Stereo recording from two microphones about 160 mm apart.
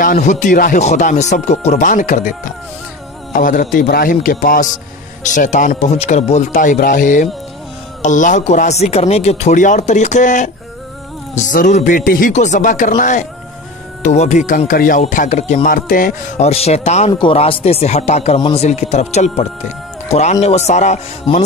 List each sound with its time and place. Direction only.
0.0 s speech: 55° left (ahead or behind)
3.3 s a man's voice: 55° left (ahead or behind)
16.4 s speech: 40° left (ahead or behind)
17.1 s speech: 35° left (ahead or behind)